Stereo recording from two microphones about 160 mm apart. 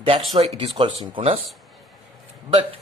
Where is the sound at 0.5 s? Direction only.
35° right (ahead or behind).